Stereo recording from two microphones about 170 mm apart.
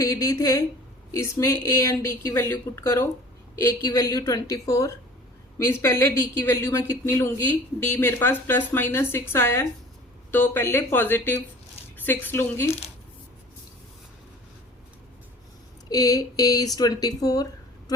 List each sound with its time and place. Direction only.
0.0 s a woman's voice: 20° left (ahead or behind)
15.9 s speech: 20° left (ahead or behind)